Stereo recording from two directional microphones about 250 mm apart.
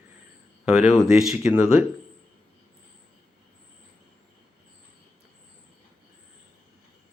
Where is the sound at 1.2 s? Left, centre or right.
Centre.